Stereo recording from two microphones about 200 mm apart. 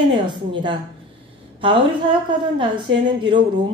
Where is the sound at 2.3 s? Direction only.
25° right (ahead or behind).